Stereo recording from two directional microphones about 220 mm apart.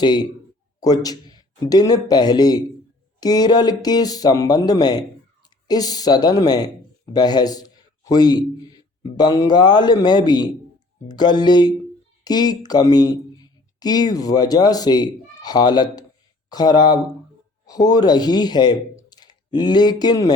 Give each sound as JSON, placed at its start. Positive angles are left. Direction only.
{"t": 0.0, "sound": "a man's voice", "side_deg": 20}